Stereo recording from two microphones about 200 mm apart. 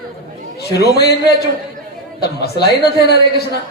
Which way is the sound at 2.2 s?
55° left (ahead or behind).